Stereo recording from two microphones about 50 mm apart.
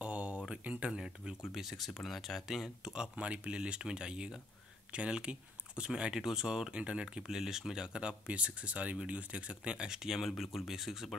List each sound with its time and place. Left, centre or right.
0.0 s a sound: right
0.7 s speech: right
0.9 s speech: centre